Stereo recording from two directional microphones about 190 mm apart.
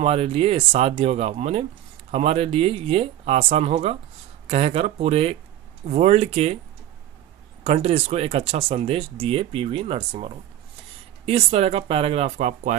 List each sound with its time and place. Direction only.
0.0 s speech: 30° right (ahead or behind)
7.6 s speech: 35° right (ahead or behind)